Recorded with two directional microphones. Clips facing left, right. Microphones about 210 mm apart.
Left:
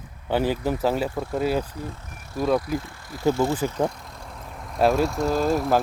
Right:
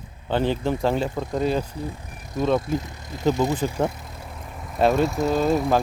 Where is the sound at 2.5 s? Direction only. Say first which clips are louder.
Right 1 dB; 25° right (ahead or behind).